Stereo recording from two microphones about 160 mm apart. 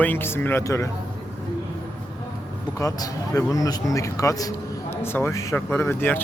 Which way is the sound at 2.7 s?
20° left (ahead or behind).